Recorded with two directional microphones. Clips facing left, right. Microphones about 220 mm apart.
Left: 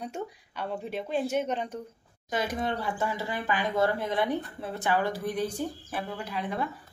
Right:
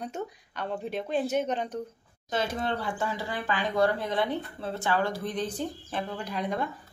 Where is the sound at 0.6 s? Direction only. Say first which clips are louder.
Right 1 dB; 5° left (ahead or behind).